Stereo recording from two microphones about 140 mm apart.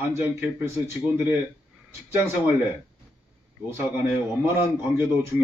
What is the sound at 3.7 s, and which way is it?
Speech, 15° right (ahead or behind).